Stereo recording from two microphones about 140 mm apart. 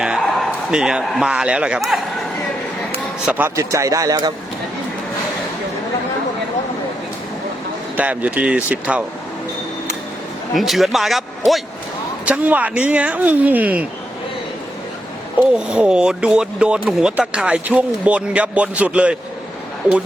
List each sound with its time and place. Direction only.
0.7 s speech: 5° right (ahead or behind)
3.2 s speech: 15° right (ahead or behind)
7.9 s speech: 10° right (ahead or behind)
10.5 s speech: centre (ahead or behind)
15.5 s speech: 5° right (ahead or behind)